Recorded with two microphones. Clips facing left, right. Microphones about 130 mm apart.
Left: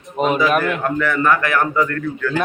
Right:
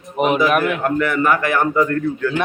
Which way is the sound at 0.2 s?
10° right (ahead or behind).